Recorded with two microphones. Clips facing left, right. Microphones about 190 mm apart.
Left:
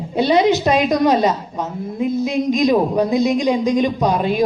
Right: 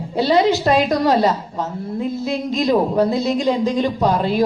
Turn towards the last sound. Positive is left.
turn(degrees=15)  # may be behind; listen again after turning